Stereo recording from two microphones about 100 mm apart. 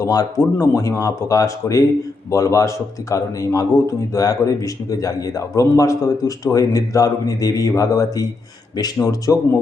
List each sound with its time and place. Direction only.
0.0 s a man's voice: 35° left (ahead or behind)